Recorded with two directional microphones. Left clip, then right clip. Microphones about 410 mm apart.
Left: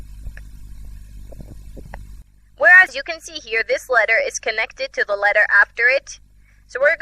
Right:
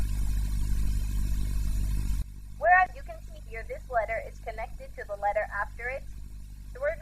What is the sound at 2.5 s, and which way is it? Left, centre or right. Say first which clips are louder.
Speech: left 11 dB; left.